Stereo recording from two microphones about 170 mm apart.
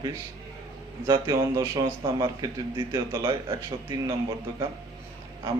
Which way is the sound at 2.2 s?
30° right (ahead or behind).